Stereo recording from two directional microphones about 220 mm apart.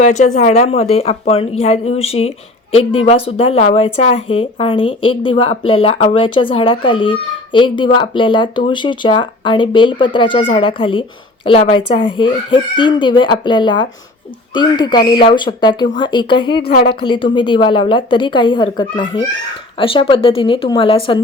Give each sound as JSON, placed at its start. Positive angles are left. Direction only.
{"t": 0.0, "sound": "speech", "side_deg": 35}